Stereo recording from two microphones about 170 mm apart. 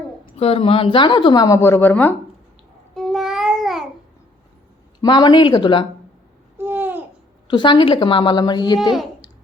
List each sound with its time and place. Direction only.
0.3 s speech: 35° left (ahead or behind); by 2.1 s 10° left (ahead or behind)
2.9 s babbling: centre (ahead or behind)
4.9 s speech: 25° left (ahead or behind)
6.6 s babbling: 10° right (ahead or behind)
7.5 s speech: 30° left (ahead or behind)